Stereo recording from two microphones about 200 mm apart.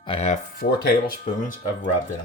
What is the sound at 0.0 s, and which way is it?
Speech, 25° left (ahead or behind).